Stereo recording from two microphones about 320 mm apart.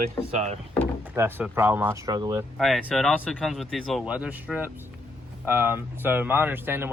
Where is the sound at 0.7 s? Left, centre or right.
Centre.